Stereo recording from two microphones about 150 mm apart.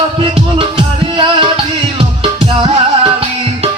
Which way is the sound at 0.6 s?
35° right (ahead or behind).